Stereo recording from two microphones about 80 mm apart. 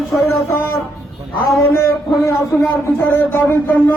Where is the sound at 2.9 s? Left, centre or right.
Left.